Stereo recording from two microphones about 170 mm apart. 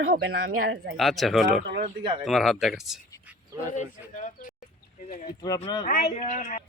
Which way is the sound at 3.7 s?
50° left (ahead or behind).